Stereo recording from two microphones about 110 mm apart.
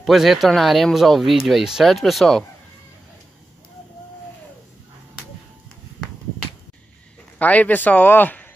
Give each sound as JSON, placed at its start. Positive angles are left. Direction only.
{"t": 0.0, "sound": "speech", "side_deg": 0}
{"t": 7.3, "sound": "a man's voice", "side_deg": 15}